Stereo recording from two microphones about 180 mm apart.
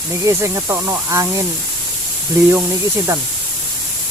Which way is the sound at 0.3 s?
15° right (ahead or behind).